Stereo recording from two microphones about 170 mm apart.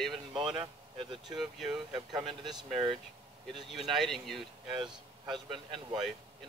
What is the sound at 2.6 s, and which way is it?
Speech, centre (ahead or behind).